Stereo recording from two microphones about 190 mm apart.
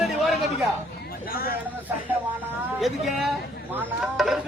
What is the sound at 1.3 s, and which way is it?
Speech, 50° left (ahead or behind).